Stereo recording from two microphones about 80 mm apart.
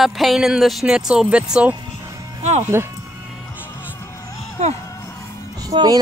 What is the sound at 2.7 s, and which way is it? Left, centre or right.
Speech, right.